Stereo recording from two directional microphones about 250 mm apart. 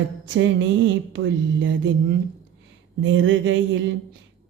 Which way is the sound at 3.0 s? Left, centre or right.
Right.